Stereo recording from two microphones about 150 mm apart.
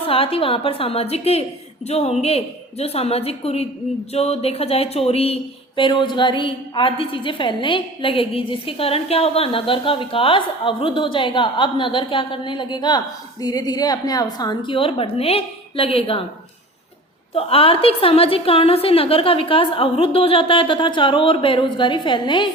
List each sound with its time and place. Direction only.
0.0 s a woman's voice: 40° left (ahead or behind)
17.3 s speech: 40° left (ahead or behind)